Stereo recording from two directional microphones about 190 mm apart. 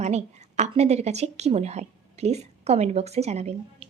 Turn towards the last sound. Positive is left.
turn(degrees=-35)  # may be behind; listen again after turning